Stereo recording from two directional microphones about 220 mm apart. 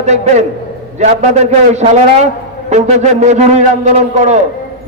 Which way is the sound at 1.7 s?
30° right (ahead or behind).